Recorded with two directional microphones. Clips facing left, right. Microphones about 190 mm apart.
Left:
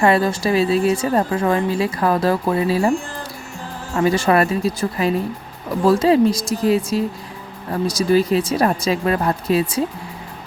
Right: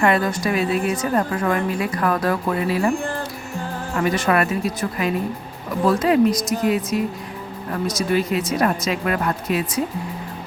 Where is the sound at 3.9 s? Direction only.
30° left (ahead or behind).